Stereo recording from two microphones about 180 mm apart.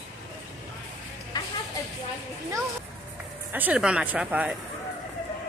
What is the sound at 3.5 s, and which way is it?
Speech, 10° right (ahead or behind).